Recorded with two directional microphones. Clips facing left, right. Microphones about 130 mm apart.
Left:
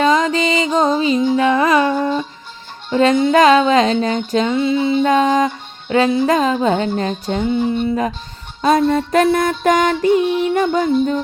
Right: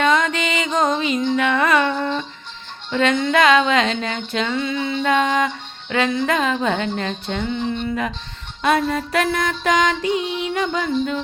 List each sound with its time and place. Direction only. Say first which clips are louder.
0.0 s music: left 4 dB; 35° left (ahead or behind)
7.4 s music: left 7 dB; 10° left (ahead or behind)
8.6 s music: left 5 dB; 35° left (ahead or behind)